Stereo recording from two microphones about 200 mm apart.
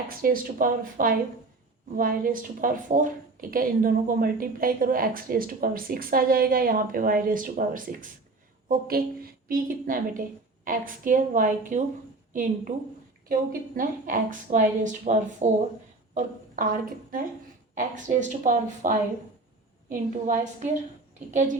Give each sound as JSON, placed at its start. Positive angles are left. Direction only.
{"t": 0.1, "sound": "a woman's voice", "side_deg": -45}
{"t": 16.6, "sound": "a woman's voice", "side_deg": -45}